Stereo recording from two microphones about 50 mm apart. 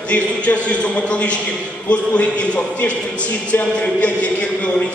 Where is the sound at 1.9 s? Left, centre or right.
Left.